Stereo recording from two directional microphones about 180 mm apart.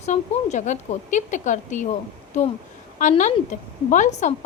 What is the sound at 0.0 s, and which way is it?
A woman's voice, 40° left (ahead or behind).